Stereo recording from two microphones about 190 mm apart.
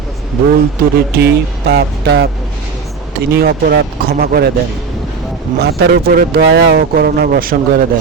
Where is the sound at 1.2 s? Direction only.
60° right (ahead or behind).